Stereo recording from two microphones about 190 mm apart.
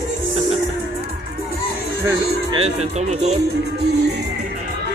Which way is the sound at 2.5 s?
35° right (ahead or behind).